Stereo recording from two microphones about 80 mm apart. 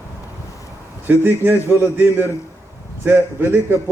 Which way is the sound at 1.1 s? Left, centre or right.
Right.